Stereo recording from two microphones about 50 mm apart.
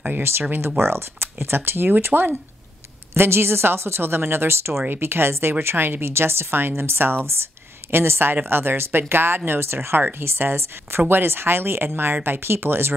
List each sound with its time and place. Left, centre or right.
0.2 s speech: right